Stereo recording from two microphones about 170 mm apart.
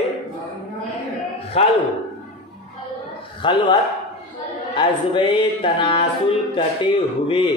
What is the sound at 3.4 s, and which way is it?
Speech, 30° left (ahead or behind).